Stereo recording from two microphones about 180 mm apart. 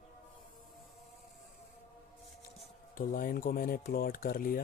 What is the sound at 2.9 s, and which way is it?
Speech, 50° left (ahead or behind).